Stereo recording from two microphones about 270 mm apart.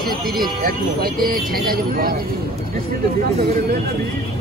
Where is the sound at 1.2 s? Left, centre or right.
Right.